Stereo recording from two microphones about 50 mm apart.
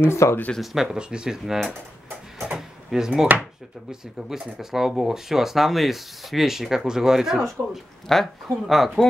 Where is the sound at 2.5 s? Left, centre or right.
Centre.